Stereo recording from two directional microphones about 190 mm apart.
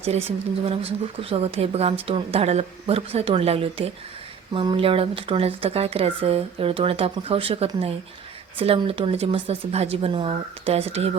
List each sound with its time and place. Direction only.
0.3 s speech: 30° right (ahead or behind)